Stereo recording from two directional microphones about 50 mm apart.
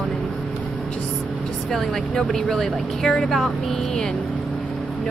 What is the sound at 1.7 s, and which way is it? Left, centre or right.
Speech, centre.